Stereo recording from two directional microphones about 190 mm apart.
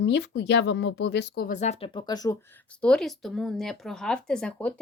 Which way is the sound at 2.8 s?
5° left (ahead or behind).